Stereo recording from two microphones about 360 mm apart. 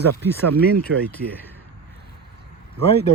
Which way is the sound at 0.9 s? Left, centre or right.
Right.